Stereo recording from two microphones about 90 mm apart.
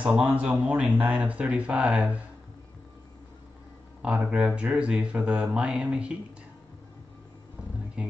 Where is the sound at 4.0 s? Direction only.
10° right (ahead or behind).